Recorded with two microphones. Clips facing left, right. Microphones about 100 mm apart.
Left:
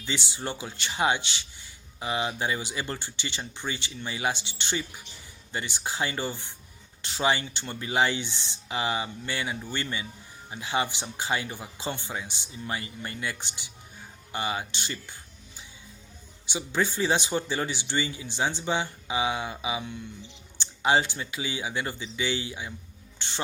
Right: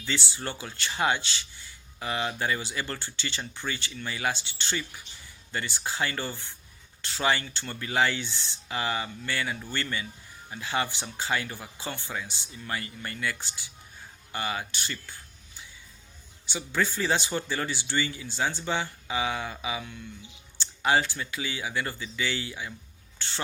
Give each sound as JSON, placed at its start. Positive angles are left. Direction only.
{"t": 0.0, "sound": "speech", "side_deg": 20}
{"t": 23.1, "sound": "music", "side_deg": 20}